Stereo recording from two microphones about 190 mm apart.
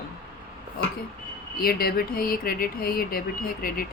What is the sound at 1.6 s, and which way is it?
Speech, 50° left (ahead or behind).